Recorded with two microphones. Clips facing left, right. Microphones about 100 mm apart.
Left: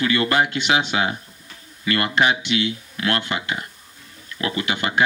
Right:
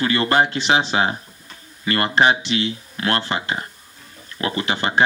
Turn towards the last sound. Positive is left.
turn(degrees=-35)  # may be behind; listen again after turning